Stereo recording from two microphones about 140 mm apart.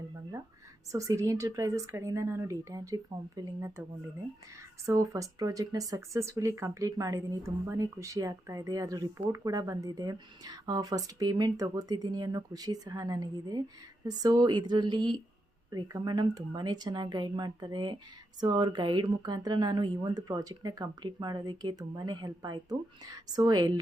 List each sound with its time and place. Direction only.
0.9 s speech: 25° right (ahead or behind)
4.9 s a woman's voice: 25° right (ahead or behind)